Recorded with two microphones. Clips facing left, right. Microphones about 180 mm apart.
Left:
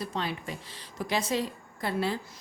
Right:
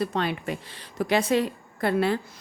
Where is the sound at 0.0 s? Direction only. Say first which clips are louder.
Right 6 dB; 65° right (ahead or behind).